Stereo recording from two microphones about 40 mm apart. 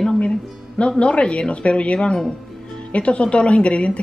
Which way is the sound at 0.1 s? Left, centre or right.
Left.